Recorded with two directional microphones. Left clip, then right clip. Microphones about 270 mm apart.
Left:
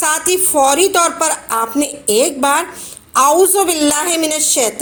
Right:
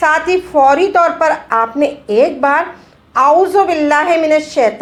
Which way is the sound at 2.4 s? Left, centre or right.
Left.